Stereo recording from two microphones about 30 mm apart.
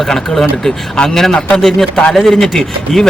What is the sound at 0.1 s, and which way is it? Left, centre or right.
Speech, centre.